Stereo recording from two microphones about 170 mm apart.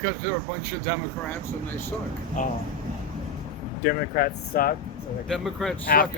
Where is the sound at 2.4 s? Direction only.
50° left (ahead or behind).